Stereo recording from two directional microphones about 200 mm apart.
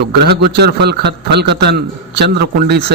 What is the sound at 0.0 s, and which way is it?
A man's voice, 55° right (ahead or behind).